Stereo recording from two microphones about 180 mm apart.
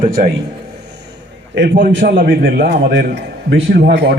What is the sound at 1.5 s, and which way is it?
Speech, 70° right (ahead or behind).